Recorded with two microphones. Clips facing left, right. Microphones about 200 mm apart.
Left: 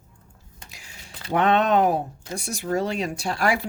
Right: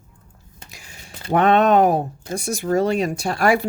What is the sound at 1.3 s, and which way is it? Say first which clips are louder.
Speech: right 5 dB; 50° right (ahead or behind).